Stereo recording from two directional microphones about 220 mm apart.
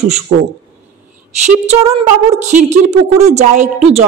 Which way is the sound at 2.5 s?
30° right (ahead or behind).